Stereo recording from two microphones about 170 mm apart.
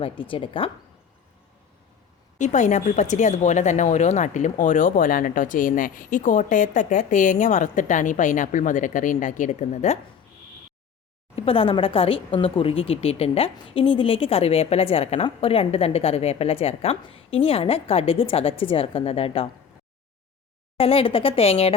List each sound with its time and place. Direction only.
0.0 s speech: 30° left (ahead or behind)
2.4 s speech: 45° left (ahead or behind)
11.3 s speech: 35° left (ahead or behind)
20.7 s speech: 35° left (ahead or behind)